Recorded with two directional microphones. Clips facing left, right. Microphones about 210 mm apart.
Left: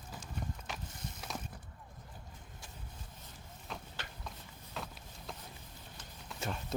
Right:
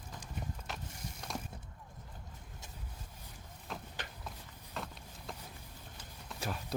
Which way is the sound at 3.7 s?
Centre (ahead or behind).